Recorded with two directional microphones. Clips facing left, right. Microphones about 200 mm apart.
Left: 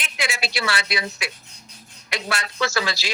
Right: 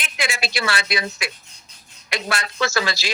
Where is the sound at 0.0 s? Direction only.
50° right (ahead or behind).